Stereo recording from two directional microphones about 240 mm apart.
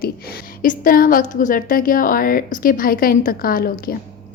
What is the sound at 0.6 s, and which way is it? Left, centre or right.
A woman's voice, left.